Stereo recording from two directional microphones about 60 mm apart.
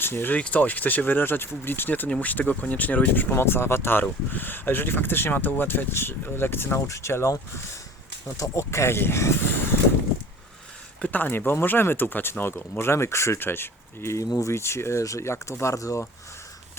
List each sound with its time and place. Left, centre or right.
0.0 s speech: left
0.3 s speech: left
6.7 s speech: left
11.0 s speech: left
13.4 s speech: left